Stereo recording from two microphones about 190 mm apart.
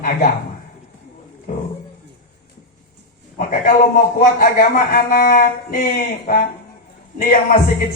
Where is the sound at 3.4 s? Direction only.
40° left (ahead or behind).